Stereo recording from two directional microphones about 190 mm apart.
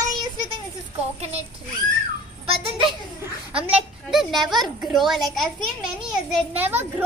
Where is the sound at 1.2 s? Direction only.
35° right (ahead or behind).